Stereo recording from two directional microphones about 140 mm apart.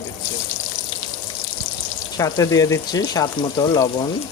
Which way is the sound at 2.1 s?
25° left (ahead or behind).